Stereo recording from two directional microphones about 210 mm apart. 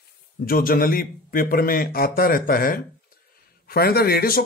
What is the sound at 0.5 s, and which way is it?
A man's voice, 45° left (ahead or behind).